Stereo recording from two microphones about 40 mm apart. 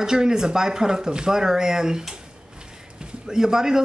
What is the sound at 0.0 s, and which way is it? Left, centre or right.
Speech, centre.